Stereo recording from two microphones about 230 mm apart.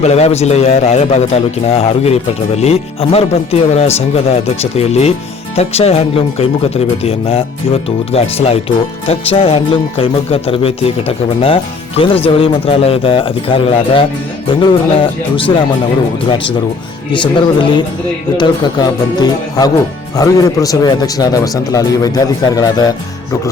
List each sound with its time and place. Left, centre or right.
0.0 s speech: left
17.1 s speech: left